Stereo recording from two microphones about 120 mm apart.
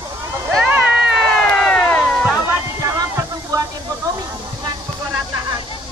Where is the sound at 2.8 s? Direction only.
30° right (ahead or behind).